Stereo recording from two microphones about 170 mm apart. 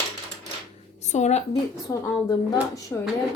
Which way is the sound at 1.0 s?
40° left (ahead or behind).